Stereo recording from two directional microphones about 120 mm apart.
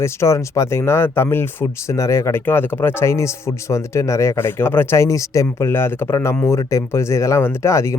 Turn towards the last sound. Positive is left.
turn(degrees=25)  # may be behind; listen again after turning